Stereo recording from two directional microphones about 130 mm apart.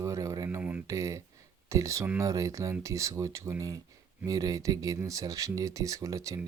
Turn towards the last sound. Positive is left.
turn(degrees=-25)  # may be behind; listen again after turning